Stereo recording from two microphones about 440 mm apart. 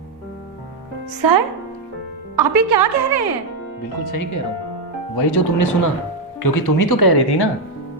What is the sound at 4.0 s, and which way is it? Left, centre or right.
Speech, left.